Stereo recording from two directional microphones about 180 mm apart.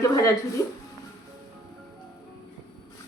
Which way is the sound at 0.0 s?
20° left (ahead or behind).